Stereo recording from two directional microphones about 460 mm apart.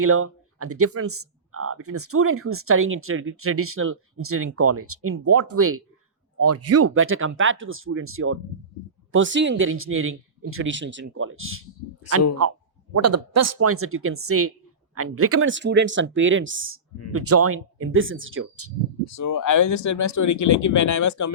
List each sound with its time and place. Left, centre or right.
0.0 s speech: right
19.0 s speech: left